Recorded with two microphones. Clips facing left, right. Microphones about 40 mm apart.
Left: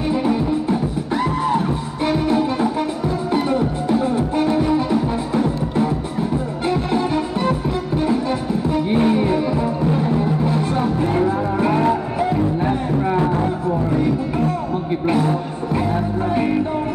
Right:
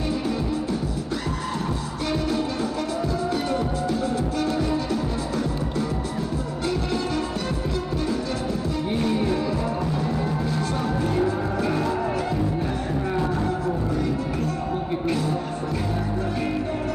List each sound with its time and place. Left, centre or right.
0.1 s music: left
2.0 s music: left
8.6 s music: left